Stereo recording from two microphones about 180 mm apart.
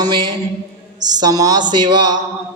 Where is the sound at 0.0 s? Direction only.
25° right (ahead or behind).